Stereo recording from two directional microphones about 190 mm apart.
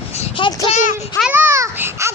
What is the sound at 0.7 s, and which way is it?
Speech, 40° left (ahead or behind).